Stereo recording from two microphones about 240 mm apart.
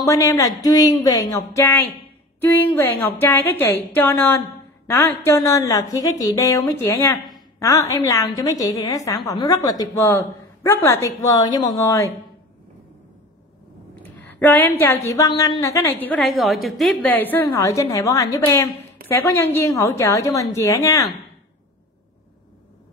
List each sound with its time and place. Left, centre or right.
0.0 s a woman's voice: centre
14.0 s a woman's voice: centre